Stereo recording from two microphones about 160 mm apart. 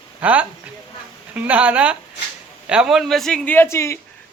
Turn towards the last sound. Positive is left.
turn(degrees=15)  # may be behind; listen again after turning